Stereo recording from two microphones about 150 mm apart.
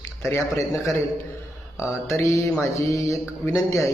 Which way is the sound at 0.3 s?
20° left (ahead or behind).